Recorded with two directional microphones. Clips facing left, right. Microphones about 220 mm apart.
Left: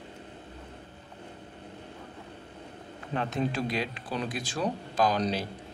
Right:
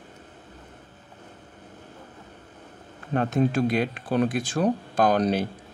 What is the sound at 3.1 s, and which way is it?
Speech, 50° right (ahead or behind).